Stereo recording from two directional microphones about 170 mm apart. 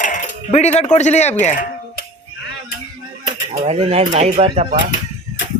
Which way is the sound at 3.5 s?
40° right (ahead or behind).